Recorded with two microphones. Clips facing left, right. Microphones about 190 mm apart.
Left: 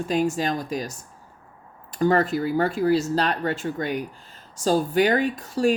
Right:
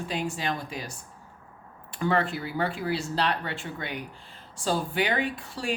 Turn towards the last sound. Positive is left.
turn(degrees=45)  # may be behind; listen again after turning